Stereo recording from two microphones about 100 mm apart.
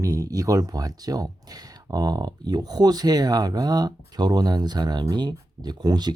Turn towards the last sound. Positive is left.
turn(degrees=-40)  # may be behind; listen again after turning